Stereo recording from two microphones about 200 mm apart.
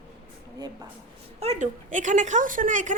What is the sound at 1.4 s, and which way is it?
Speech, 35° right (ahead or behind).